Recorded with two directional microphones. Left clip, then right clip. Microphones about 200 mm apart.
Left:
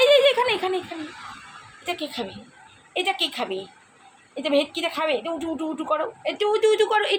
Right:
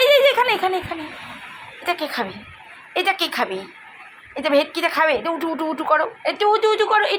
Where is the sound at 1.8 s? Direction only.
Centre (ahead or behind); by 7.1 s 15° left (ahead or behind).